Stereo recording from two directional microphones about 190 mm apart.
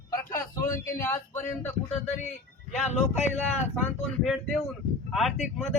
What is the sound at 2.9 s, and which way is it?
Speech, 35° left (ahead or behind).